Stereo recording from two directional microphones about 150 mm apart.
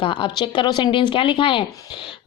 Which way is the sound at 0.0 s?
35° left (ahead or behind).